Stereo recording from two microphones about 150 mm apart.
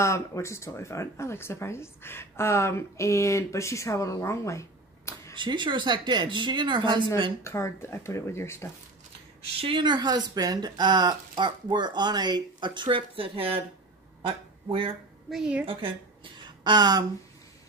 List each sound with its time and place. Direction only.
0.0 s speech: 20° left (ahead or behind)
5.3 s a woman's voice: 30° right (ahead or behind)
7.4 s speech: 20° left (ahead or behind)
9.6 s speech: 35° right (ahead or behind)
15.2 s a woman's voice: 5° right (ahead or behind)
15.6 s a woman's voice: 35° right (ahead or behind)
16.4 s a sound: 30° right (ahead or behind)